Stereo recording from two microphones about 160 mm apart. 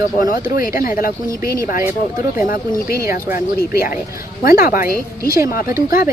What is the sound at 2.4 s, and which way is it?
Speech, 60° left (ahead or behind).